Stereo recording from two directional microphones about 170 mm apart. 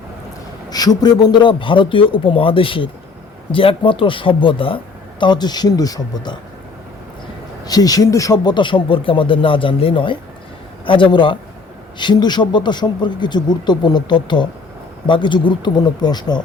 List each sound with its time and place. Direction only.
0.7 s speech: 20° left (ahead or behind)
7.6 s speech: 20° left (ahead or behind)